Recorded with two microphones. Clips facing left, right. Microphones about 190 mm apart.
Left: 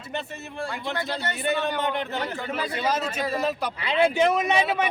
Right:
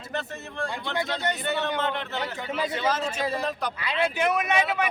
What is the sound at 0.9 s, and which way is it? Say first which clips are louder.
Speech: right 6 dB; 15° right (ahead or behind).